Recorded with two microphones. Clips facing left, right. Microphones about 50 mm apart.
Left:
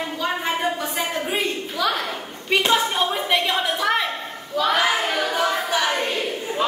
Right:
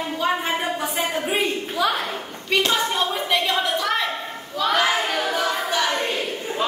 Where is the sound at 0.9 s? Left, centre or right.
Centre.